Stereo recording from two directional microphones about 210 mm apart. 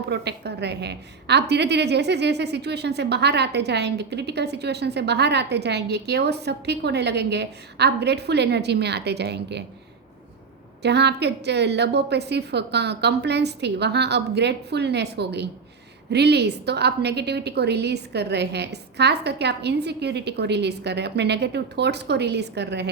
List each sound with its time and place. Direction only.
0.1 s a woman's voice: 50° right (ahead or behind)
10.8 s a woman's voice: 55° right (ahead or behind)